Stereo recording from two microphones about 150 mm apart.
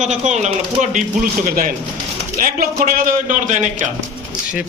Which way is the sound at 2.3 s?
65° right (ahead or behind).